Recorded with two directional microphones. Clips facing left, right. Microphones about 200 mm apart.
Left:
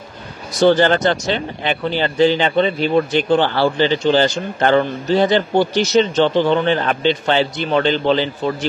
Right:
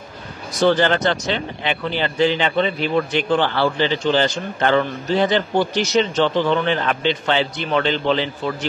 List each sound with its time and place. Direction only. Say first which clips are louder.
0.6 s speech: left 3 dB; 40° left (ahead or behind)